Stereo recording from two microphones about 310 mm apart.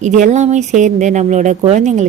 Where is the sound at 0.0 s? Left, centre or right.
Right.